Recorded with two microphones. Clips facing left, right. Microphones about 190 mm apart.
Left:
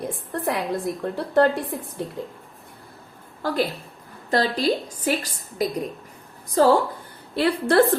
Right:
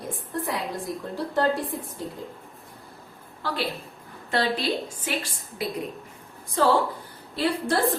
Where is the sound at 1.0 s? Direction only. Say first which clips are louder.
Left 5 dB; 65° left (ahead or behind).